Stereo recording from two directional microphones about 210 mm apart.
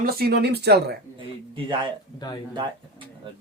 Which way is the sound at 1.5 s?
25° right (ahead or behind).